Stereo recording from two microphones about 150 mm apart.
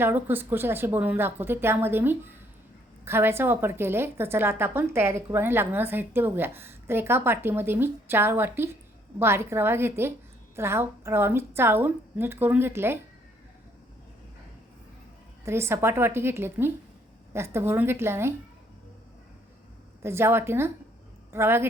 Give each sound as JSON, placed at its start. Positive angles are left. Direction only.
{"t": 0.0, "sound": "a woman's voice", "side_deg": -15}
{"t": 15.4, "sound": "a woman's voice", "side_deg": -15}
{"t": 20.0, "sound": "a woman's voice", "side_deg": -15}